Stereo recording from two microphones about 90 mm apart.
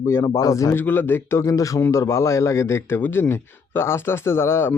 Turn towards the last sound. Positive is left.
turn(degrees=30)  # may be behind; listen again after turning